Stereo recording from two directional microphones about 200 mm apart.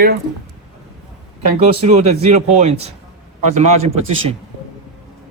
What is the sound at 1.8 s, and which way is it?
Speech, 35° right (ahead or behind).